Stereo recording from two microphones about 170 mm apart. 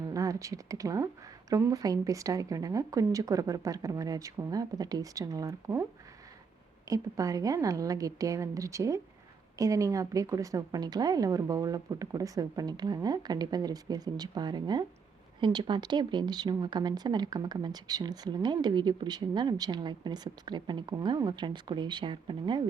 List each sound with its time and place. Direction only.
0.0 s speech: 20° right (ahead or behind)
6.8 s speech: 20° right (ahead or behind)